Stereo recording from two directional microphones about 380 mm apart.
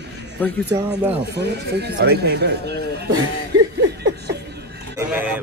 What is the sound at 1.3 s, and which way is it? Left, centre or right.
Speech, right.